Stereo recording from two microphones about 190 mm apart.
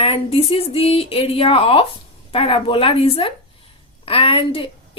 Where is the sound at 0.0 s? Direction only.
30° left (ahead or behind).